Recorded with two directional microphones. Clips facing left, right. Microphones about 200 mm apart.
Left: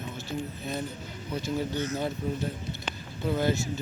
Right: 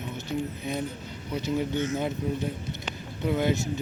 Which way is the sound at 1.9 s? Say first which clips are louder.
Right 2 dB; 20° right (ahead or behind).